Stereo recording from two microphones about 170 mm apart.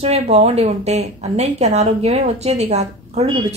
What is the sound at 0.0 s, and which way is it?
Speech, 35° right (ahead or behind).